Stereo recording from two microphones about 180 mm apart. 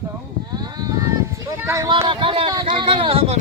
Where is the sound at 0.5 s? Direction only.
20° right (ahead or behind).